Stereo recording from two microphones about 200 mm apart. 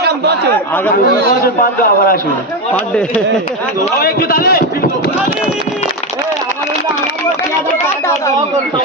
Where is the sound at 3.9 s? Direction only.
50° left (ahead or behind).